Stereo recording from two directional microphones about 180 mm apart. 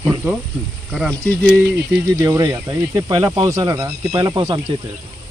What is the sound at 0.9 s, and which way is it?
Speech, centre (ahead or behind).